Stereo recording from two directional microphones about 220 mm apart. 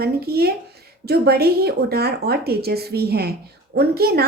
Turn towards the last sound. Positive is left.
turn(degrees=-45)  # may be behind; listen again after turning